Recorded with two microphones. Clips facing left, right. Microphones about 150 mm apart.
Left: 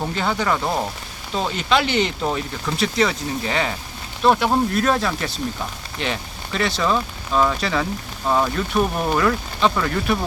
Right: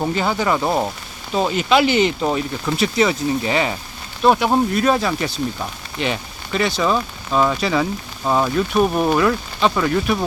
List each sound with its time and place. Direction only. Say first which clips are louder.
0.0 s speech: right 3 dB; 5° right (ahead or behind)